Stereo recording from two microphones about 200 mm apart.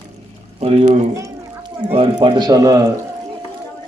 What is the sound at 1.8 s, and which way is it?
Speech, 25° right (ahead or behind).